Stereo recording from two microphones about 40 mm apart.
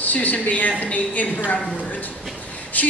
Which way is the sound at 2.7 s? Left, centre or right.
Left.